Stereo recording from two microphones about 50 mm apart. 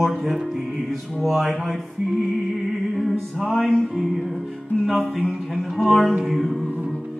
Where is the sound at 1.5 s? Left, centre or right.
Centre.